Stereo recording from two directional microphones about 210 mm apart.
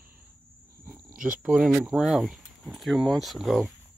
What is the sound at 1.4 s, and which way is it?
Speech, 5° right (ahead or behind).